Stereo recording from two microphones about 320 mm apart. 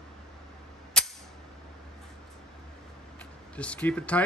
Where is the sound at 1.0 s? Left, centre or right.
Centre.